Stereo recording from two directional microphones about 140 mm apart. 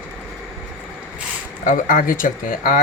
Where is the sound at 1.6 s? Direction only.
70° left (ahead or behind); by 2.8 s 85° left.